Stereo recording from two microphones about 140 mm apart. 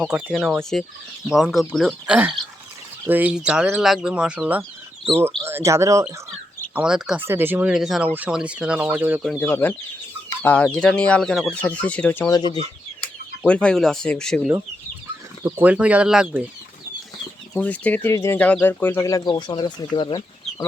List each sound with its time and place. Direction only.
0.0 s speech: 10° right (ahead or behind)
3.1 s speech: 10° right (ahead or behind)
6.7 s speech: 5° right (ahead or behind)
7.2 s speech: 15° right (ahead or behind)
9.4 s speech: 15° left (ahead or behind)
12.3 s speech: 35° left (ahead or behind)
13.5 s speech: 5° left (ahead or behind)
15.4 s speech: 15° right (ahead or behind)
17.5 s speech: 10° left (ahead or behind); by 20.7 s 30° left (ahead or behind)